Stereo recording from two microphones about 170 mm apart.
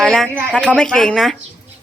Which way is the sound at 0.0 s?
Centre (ahead or behind).